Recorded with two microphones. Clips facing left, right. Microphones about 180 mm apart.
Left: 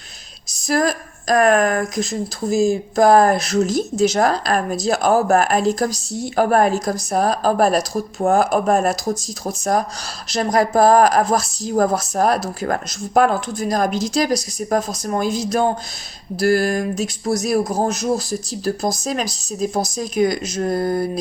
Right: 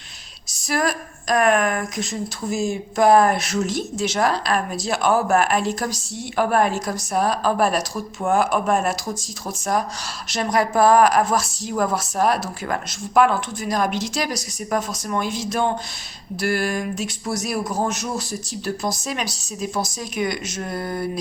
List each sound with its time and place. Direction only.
0.7 s speech: 40° left (ahead or behind)